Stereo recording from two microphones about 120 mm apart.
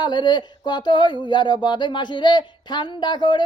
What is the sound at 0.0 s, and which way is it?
Speech, 40° left (ahead or behind).